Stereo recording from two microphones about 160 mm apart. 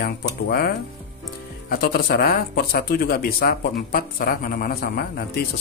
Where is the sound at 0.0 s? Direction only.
70° left (ahead or behind).